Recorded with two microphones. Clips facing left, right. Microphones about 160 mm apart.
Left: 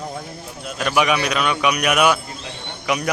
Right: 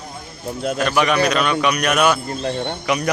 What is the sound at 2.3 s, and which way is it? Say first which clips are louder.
Speech: right 11 dB; 55° right (ahead or behind).